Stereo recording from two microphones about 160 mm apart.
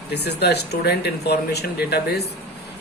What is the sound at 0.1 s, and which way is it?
Speech, 90° left.